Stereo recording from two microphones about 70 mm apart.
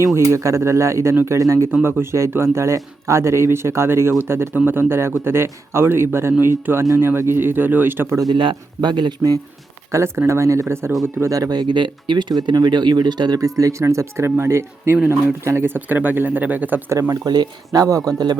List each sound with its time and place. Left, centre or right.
0.0 s speech: right
1.8 s a man's voice: right
8.8 s speech: right
9.9 s a man's voice: right
11.2 s speech: right
16.9 s speech: right
17.2 s speech: right